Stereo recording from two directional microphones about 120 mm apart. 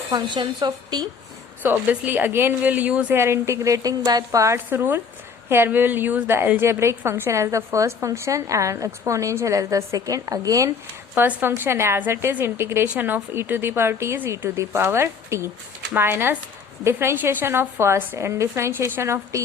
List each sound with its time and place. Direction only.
0.1 s a woman's voice: 40° right (ahead or behind)
1.6 s a woman's voice: 15° right (ahead or behind); by 10.7 s 30° right (ahead or behind)
11.1 s a woman's voice: 15° right (ahead or behind)